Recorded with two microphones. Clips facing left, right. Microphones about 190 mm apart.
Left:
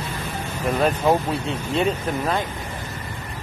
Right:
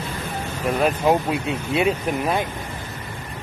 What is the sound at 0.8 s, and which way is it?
Speech, 10° right (ahead or behind).